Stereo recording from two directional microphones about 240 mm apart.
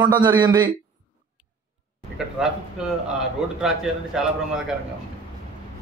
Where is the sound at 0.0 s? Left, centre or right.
Centre.